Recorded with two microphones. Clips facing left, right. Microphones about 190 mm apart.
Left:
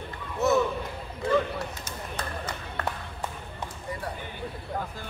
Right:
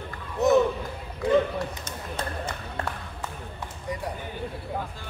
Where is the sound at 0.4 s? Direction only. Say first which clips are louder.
Right 3 dB; 15° right (ahead or behind).